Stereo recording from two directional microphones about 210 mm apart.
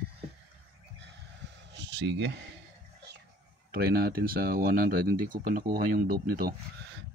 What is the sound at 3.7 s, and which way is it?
Speech, 45° right (ahead or behind).